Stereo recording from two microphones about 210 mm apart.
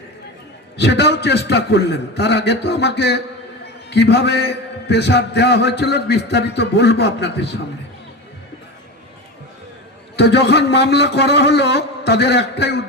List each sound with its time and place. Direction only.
0.8 s a man's voice: 55° left (ahead or behind)
10.2 s a man's voice: 55° left (ahead or behind)